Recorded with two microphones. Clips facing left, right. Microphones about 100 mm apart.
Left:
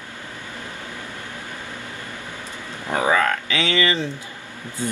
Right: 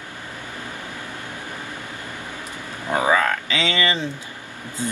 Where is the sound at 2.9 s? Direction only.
20° right (ahead or behind).